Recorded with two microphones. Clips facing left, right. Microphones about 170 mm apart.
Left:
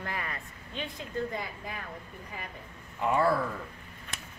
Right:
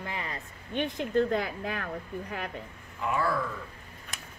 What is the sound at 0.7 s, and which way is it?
Speech, 80° right.